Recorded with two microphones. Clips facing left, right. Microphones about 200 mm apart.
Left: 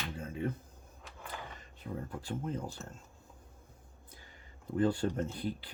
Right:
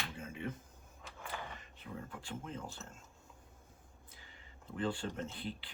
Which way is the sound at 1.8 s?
40° left (ahead or behind).